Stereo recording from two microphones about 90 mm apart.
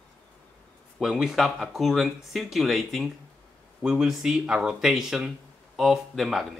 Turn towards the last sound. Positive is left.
turn(degrees=0)  # may be behind; listen again after turning